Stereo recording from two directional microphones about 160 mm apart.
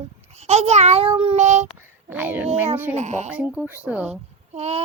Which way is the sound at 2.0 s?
10° right (ahead or behind).